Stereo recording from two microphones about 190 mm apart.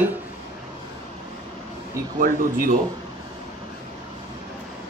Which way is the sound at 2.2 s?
45° right (ahead or behind).